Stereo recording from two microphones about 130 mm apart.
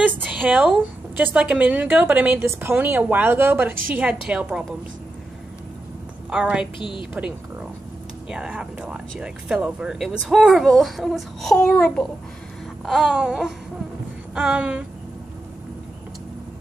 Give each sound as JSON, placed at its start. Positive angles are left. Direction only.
{"t": 0.0, "sound": "a woman's voice", "side_deg": -10}
{"t": 6.3, "sound": "a woman's voice", "side_deg": -5}
{"t": 6.8, "sound": "a woman's voice", "side_deg": 40}
{"t": 8.3, "sound": "a woman's voice", "side_deg": -5}